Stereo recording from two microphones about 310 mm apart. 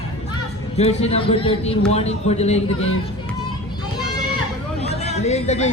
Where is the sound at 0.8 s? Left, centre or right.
Centre.